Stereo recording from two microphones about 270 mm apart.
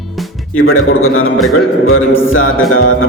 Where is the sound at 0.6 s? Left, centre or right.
Left.